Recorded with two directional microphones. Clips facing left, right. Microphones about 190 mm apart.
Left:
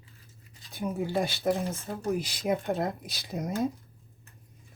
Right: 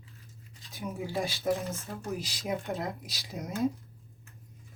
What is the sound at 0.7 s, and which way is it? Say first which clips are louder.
Speech: left 5 dB; 55° left (ahead or behind).